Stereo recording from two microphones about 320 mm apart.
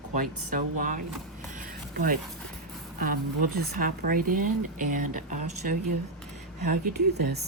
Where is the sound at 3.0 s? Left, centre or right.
Right.